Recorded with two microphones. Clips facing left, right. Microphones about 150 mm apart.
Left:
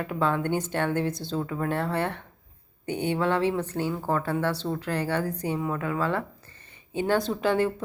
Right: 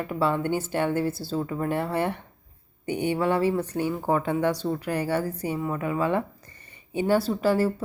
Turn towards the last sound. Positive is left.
turn(degrees=-5)  # may be behind; listen again after turning